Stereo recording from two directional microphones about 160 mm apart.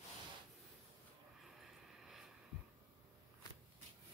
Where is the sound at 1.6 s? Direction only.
Centre (ahead or behind).